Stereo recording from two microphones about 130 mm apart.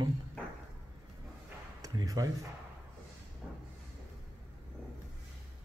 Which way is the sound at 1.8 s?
25° right (ahead or behind).